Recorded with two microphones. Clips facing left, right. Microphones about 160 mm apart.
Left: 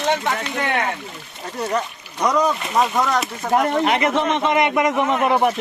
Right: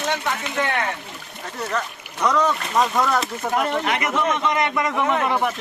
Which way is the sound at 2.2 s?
10° left (ahead or behind).